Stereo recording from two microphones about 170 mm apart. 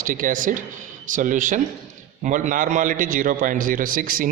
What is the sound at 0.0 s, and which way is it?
A man's voice, 55° right (ahead or behind).